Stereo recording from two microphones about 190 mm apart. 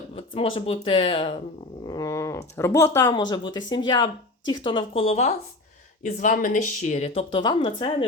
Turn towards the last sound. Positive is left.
turn(degrees=25)  # may be behind; listen again after turning